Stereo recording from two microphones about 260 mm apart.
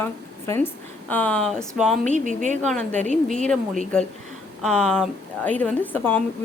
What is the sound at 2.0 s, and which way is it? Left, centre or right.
Speech, right.